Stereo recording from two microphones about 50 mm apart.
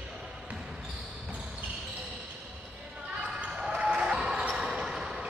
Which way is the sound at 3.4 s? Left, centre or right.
Centre.